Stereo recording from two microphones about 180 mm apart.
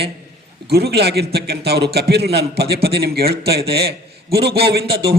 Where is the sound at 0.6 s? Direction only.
60° right (ahead or behind).